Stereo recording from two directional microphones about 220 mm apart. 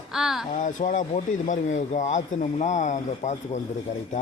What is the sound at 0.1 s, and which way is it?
Speech, centre (ahead or behind).